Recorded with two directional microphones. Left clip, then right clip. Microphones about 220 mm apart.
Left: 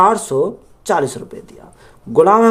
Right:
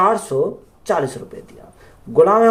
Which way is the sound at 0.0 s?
50° left (ahead or behind).